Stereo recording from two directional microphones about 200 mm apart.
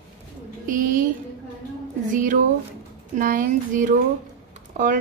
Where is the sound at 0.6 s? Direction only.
40° right (ahead or behind).